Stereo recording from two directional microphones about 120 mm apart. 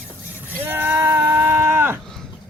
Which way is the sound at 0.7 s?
15° right (ahead or behind).